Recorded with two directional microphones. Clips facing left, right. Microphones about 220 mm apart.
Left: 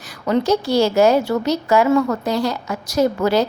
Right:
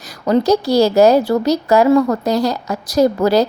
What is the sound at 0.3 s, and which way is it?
A woman's voice, 40° right (ahead or behind).